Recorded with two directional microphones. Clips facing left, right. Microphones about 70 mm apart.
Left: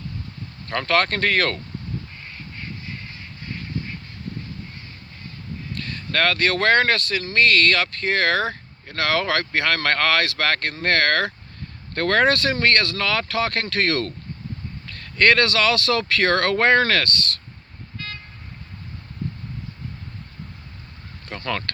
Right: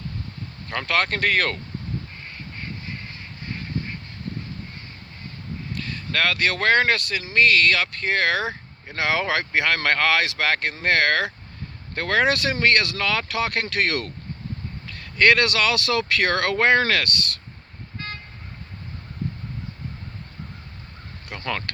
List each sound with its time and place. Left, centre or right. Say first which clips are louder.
0.7 s speech: left 3 dB; centre
5.7 s speech: left 2 dB; centre
8.9 s speech: left 1 dB; centre
17.9 s vehicle: right 1 dB; right
21.2 s speech: left 2 dB; centre